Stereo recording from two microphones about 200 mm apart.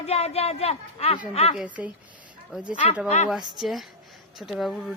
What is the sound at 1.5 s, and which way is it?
Speech, 5° right (ahead or behind).